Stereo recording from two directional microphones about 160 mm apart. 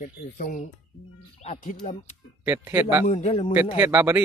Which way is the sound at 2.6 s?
15° right (ahead or behind).